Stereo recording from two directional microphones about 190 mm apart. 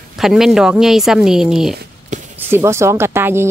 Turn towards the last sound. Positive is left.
turn(degrees=-10)  # may be behind; listen again after turning